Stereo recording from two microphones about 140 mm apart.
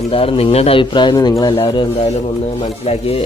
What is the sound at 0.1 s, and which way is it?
Speech, 45° left (ahead or behind).